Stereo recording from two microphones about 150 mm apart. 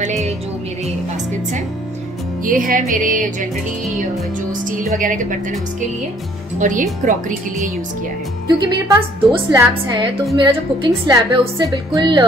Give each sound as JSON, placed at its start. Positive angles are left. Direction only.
{"t": 0.0, "sound": "speech", "side_deg": -50}
{"t": 2.4, "sound": "speech", "side_deg": -65}
{"t": 4.5, "sound": "speech", "side_deg": -60}
{"t": 6.6, "sound": "speech", "side_deg": -55}
{"t": 8.5, "sound": "a woman's voice", "side_deg": -25}